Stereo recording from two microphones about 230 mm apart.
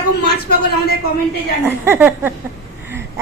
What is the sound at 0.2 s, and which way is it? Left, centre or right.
Speech, left.